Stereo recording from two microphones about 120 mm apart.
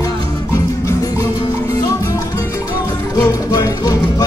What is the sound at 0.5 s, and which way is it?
Music, 25° left (ahead or behind).